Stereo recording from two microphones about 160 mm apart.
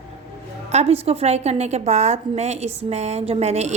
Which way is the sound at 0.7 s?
40° right (ahead or behind).